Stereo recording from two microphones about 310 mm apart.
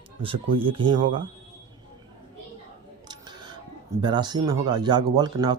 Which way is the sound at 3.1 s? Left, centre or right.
Centre.